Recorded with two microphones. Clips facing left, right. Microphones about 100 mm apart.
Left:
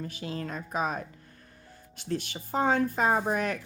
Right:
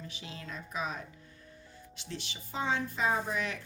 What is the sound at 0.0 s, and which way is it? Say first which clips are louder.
Speech: left 10 dB; 45° left (ahead or behind).